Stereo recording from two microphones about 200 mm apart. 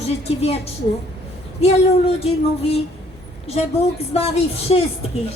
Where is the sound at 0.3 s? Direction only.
30° left (ahead or behind).